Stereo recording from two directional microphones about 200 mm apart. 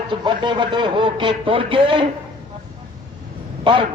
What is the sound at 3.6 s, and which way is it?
Speech, 25° right (ahead or behind).